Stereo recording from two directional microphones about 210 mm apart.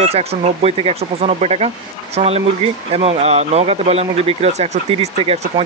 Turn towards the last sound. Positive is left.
turn(degrees=-30)  # may be behind; listen again after turning